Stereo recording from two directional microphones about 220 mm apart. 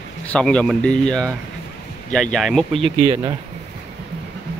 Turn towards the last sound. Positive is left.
turn(degrees=-15)  # may be behind; listen again after turning